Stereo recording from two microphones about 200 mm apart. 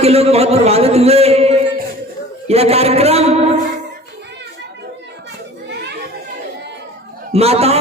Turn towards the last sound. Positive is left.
turn(degrees=-30)  # may be behind; listen again after turning